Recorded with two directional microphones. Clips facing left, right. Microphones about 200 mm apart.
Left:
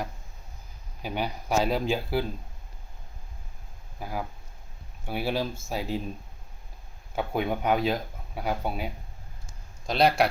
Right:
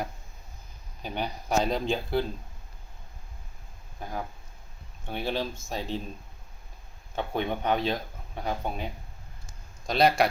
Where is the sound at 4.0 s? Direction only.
10° left (ahead or behind).